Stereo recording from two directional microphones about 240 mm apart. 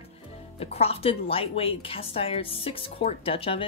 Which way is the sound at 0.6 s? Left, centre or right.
Left.